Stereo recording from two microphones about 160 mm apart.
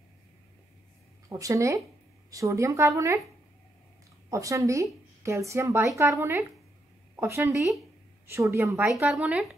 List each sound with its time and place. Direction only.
1.3 s a woman's voice: 20° right (ahead or behind)
4.3 s a woman's voice: 20° right (ahead or behind)